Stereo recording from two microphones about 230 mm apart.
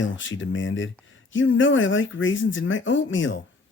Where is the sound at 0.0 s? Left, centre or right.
Left.